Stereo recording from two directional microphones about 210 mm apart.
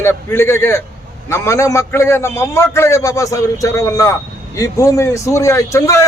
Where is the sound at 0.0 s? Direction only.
10° left (ahead or behind).